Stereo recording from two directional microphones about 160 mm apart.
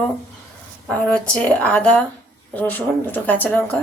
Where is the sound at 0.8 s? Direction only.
5° left (ahead or behind).